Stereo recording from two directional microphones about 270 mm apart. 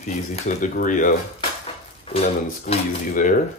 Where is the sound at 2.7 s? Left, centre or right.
Left.